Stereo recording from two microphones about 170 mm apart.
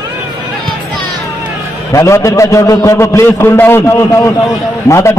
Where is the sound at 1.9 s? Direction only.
20° left (ahead or behind).